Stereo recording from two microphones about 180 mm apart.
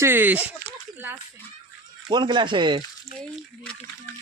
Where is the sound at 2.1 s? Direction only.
25° right (ahead or behind).